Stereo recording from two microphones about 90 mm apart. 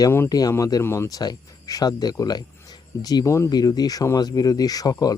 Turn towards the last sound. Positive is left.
turn(degrees=45)  # may be behind; listen again after turning